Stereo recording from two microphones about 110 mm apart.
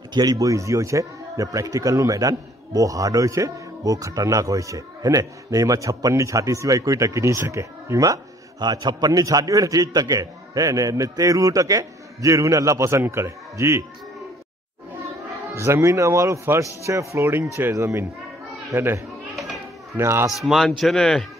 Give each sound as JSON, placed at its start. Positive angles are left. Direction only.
{"t": 0.1, "sound": "speech", "side_deg": -40}
{"t": 15.5, "sound": "speech", "side_deg": -25}
{"t": 19.3, "sound": "children playing", "side_deg": 0}
{"t": 20.0, "sound": "speech", "side_deg": -25}
{"t": 20.2, "sound": "a man's voice", "side_deg": 0}